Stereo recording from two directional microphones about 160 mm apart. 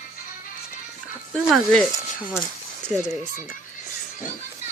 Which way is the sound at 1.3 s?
Centre (ahead or behind).